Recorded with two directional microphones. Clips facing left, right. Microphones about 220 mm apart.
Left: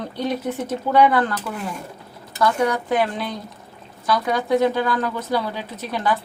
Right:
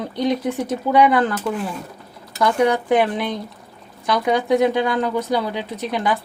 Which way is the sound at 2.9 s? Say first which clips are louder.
Right 4 dB; 15° right (ahead or behind).